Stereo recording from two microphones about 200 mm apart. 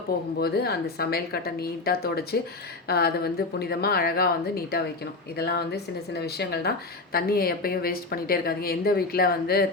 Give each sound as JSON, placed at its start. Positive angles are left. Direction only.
{"t": 0.3, "sound": "speech", "side_deg": 50}